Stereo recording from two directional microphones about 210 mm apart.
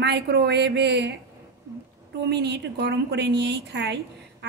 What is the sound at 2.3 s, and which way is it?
A woman's voice, 55° right (ahead or behind).